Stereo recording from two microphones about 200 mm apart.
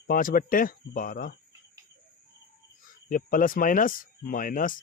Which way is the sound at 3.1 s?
45° left (ahead or behind).